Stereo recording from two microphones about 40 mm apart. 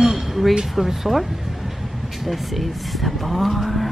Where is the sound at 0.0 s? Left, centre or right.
Centre.